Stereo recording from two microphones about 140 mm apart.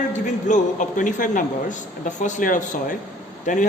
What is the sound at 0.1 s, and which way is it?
A man's voice, 60° left (ahead or behind).